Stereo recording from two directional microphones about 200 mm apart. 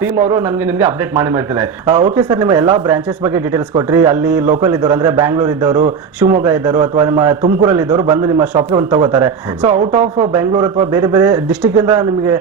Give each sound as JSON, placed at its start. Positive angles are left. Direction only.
{"t": 0.2, "sound": "speech", "side_deg": -30}
{"t": 0.8, "sound": "speech", "side_deg": -15}
{"t": 1.9, "sound": "speech", "side_deg": -35}
{"t": 2.3, "sound": "speech", "side_deg": -20}
{"t": 9.7, "sound": "speech", "side_deg": -35}
{"t": 10.9, "sound": "speech", "side_deg": -15}